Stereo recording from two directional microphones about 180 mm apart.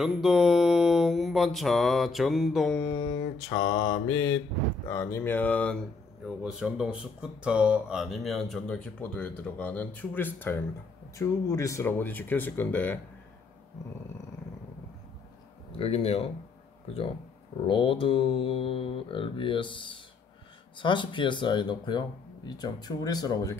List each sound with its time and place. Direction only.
0.0 s speech: centre (ahead or behind)
2.9 s speech: 25° left (ahead or behind)
3.5 s mantra: 90° left
4.8 s speech: 15° left (ahead or behind)
6.2 s speech: 5° right (ahead or behind)
15.8 s speech: 35° left (ahead or behind)
17.6 s speech: 30° left (ahead or behind)